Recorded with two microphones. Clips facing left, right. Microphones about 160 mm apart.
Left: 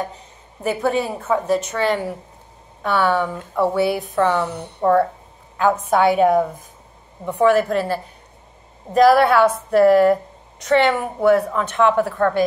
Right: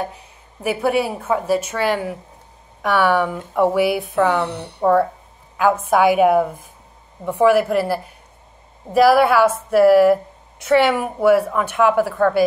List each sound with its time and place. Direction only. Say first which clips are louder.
0.6 s a woman's voice: right 1 dB; 10° right (ahead or behind)
4.5 s speech: right 1 dB; 70° right (ahead or behind)
5.6 s a woman's voice: right 1 dB; 10° right (ahead or behind)